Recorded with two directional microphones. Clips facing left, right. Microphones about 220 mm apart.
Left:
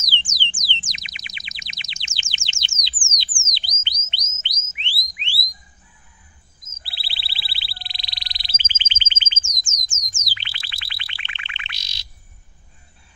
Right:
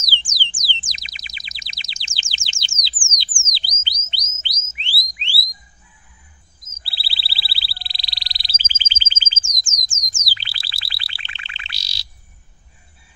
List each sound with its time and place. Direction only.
0.3 s a sound: 35° right (ahead or behind)
0.9 s bird: 35° right (ahead or behind)
3.5 s a sound: 30° right (ahead or behind)
4.4 s music: 35° right (ahead or behind)
6.8 s frog: 35° right (ahead or behind)
10.0 s chirp tone: 35° right (ahead or behind)